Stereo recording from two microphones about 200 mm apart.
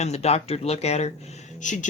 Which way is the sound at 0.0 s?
35° left (ahead or behind).